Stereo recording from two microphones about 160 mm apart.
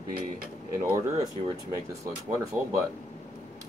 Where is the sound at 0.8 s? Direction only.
15° right (ahead or behind).